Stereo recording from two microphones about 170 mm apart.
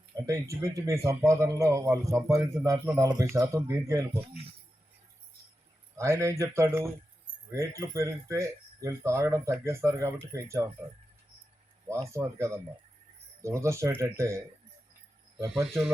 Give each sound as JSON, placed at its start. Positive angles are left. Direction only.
{"t": 0.3, "sound": "speech", "side_deg": -20}
{"t": 6.0, "sound": "speech", "side_deg": -15}
{"t": 11.9, "sound": "speech", "side_deg": -15}
{"t": 15.4, "sound": "speech", "side_deg": 0}